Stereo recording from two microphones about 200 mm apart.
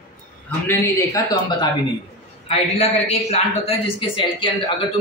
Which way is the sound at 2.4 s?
30° left (ahead or behind).